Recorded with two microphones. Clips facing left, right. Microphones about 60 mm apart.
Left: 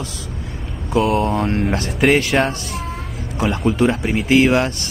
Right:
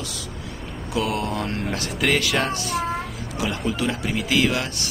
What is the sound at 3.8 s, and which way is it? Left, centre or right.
Speech, left.